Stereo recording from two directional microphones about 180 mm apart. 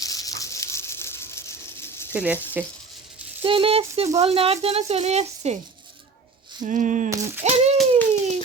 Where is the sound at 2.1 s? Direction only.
10° right (ahead or behind).